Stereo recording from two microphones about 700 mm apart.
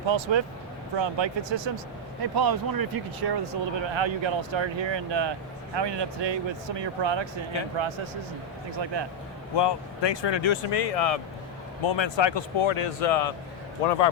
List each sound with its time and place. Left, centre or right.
0.0 s speech: right
9.6 s speech: left
11.8 s speech: left